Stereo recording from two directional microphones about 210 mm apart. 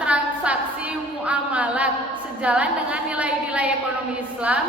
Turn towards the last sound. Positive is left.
turn(degrees=-5)  # may be behind; listen again after turning